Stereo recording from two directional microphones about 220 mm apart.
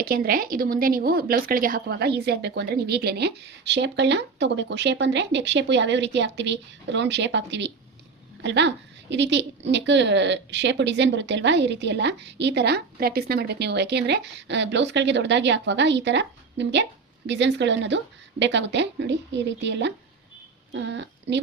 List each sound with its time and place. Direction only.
0.0 s a woman's voice: 40° right (ahead or behind)